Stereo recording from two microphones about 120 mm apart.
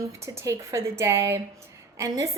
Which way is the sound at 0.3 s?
25° right (ahead or behind).